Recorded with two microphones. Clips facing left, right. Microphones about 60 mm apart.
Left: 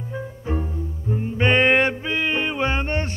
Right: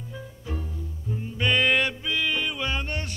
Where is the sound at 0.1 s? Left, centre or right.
Left.